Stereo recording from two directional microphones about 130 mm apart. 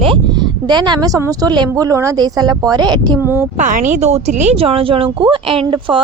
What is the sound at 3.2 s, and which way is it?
Speech, 20° right (ahead or behind).